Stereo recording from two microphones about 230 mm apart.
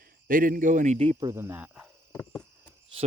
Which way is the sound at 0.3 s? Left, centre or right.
Right.